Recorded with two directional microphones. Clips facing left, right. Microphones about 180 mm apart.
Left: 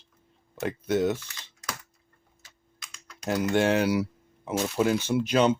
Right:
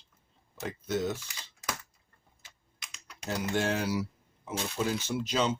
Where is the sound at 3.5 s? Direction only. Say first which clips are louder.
Left 7 dB; 70° left (ahead or behind).